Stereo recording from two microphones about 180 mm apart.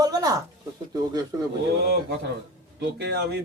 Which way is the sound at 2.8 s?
65° right (ahead or behind).